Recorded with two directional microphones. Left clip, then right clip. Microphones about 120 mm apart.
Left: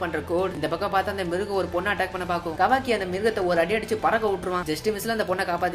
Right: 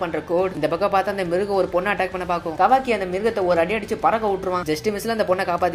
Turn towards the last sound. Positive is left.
turn(degrees=-35)  # may be behind; listen again after turning